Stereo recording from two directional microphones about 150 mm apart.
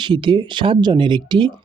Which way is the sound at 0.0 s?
30° right (ahead or behind).